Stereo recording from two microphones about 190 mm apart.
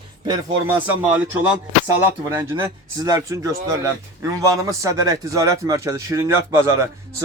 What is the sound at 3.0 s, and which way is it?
Speech, 15° right (ahead or behind).